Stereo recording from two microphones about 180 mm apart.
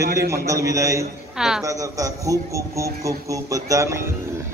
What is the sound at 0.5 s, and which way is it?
A man's voice, 15° right (ahead or behind).